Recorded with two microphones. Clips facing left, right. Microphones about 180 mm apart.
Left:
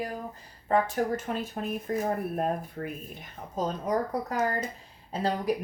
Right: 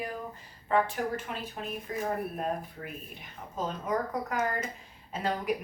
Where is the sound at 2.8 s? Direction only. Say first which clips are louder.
Left 7 dB; 55° left (ahead or behind).